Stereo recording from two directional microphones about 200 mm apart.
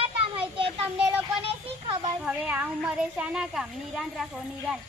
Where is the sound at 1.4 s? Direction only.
30° right (ahead or behind).